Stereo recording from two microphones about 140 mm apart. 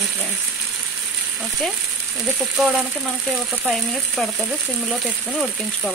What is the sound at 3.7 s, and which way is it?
Frying, centre (ahead or behind).